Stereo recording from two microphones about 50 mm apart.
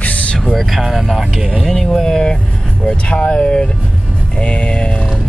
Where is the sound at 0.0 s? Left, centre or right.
Left.